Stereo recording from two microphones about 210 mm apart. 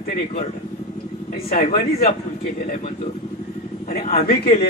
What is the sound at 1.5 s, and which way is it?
Speech, 45° left (ahead or behind).